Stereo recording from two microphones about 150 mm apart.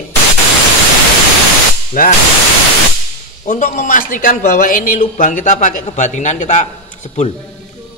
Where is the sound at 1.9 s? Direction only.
55° left (ahead or behind).